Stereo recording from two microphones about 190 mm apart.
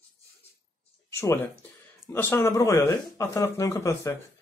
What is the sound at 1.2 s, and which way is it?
Speech, 15° left (ahead or behind).